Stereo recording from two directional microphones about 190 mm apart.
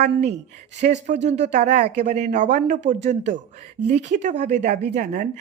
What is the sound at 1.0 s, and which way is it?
A woman's voice, 40° right (ahead or behind).